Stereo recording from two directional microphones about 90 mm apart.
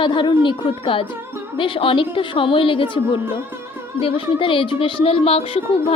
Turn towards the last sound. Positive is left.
turn(degrees=90)